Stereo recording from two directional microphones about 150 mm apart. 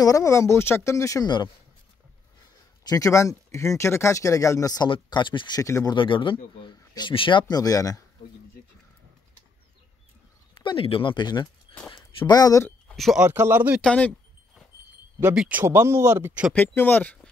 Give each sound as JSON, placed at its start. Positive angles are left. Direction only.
{"t": 0.0, "sound": "speech", "side_deg": 20}
{"t": 2.8, "sound": "speech", "side_deg": 25}
{"t": 5.9, "sound": "speech", "side_deg": 35}
{"t": 10.5, "sound": "speech", "side_deg": 35}
{"t": 11.7, "sound": "a sound", "side_deg": 35}
{"t": 12.2, "sound": "speech", "side_deg": 25}
{"t": 12.6, "sound": "speech", "side_deg": 5}
{"t": 13.3, "sound": "speech", "side_deg": -15}
{"t": 13.7, "sound": "speech", "side_deg": 5}
{"t": 15.3, "sound": "speech", "side_deg": -10}
{"t": 16.5, "sound": "speech", "side_deg": 15}